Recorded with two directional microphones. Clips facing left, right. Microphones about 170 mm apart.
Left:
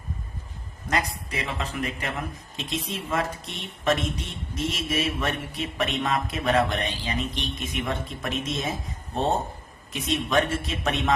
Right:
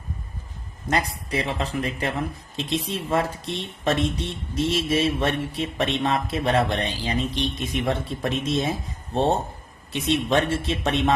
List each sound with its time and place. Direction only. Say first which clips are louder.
0.9 s speech: right 3 dB; 30° right (ahead or behind)